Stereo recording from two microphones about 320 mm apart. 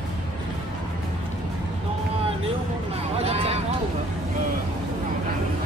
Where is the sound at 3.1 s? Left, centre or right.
Centre.